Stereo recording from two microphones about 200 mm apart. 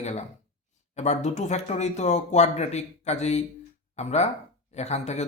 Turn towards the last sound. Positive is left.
turn(degrees=35)  # may be behind; listen again after turning